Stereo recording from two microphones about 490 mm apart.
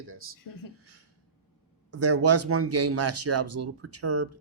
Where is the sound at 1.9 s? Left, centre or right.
Right.